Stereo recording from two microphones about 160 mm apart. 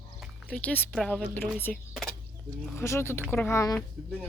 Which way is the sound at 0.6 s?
10° left (ahead or behind).